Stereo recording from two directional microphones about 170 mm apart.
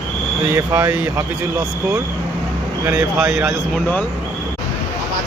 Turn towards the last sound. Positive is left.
turn(degrees=0)  # may be behind; listen again after turning